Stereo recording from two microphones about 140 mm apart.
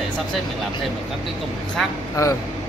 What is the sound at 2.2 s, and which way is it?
Speech, 25° left (ahead or behind).